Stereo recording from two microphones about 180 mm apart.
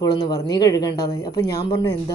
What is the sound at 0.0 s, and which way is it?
Speech, 20° left (ahead or behind).